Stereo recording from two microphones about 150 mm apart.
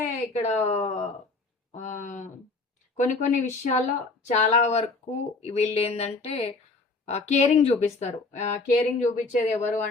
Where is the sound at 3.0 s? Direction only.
55° left (ahead or behind).